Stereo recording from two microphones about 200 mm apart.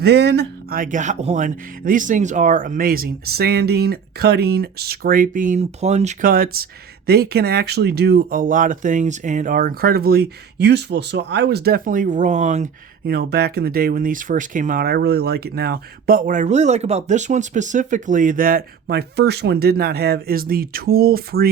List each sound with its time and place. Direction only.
0.0 s speech: 55° right (ahead or behind); by 12.7 s 35° right (ahead or behind)
13.1 s speech: 55° right (ahead or behind)